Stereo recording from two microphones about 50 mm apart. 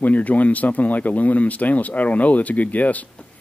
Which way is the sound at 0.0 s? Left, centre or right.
Left.